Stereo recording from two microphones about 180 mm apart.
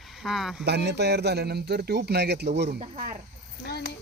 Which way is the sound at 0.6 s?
65° right (ahead or behind).